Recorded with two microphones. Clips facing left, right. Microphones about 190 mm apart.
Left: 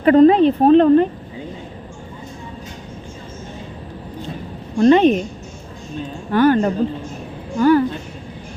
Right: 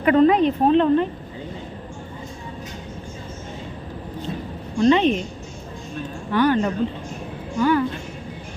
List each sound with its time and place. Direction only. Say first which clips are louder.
0.0 s speech: left 5 dB; 35° left (ahead or behind)
4.8 s speech: left 5 dB; 45° left (ahead or behind)
6.3 s speech: left 4 dB; 45° left (ahead or behind)